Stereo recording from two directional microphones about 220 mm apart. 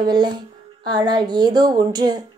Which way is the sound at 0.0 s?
20° right (ahead or behind).